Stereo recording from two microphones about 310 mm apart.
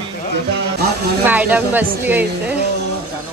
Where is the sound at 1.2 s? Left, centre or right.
Centre.